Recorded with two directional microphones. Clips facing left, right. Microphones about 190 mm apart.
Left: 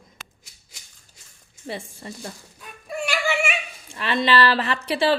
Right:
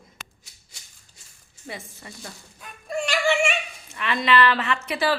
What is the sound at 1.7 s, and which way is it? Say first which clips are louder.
Speech: left 5 dB; 30° left (ahead or behind).